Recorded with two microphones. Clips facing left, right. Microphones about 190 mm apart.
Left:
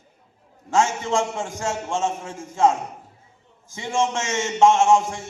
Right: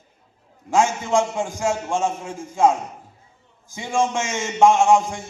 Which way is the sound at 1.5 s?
15° right (ahead or behind).